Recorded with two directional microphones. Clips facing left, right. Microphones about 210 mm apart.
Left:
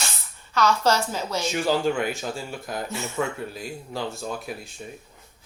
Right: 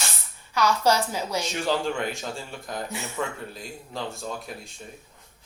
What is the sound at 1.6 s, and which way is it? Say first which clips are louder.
Speech: left 4 dB; centre (ahead or behind).